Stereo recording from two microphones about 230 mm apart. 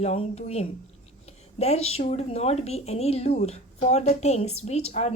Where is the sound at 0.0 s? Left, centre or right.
Left.